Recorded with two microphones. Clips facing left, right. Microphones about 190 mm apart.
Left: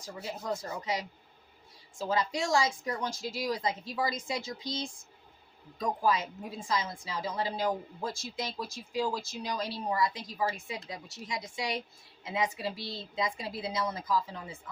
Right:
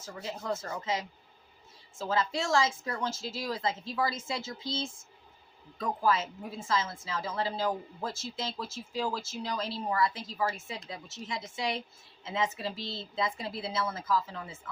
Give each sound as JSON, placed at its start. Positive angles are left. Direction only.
{"t": 0.0, "sound": "a woman's voice", "side_deg": 15}